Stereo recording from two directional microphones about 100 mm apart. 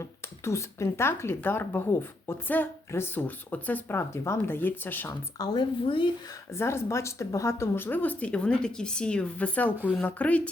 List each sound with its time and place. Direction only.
0.0 s speech: 30° left (ahead or behind)
5.4 s speech: 40° left (ahead or behind)
5.8 s speech: 60° left (ahead or behind)
6.5 s speech: 25° left (ahead or behind)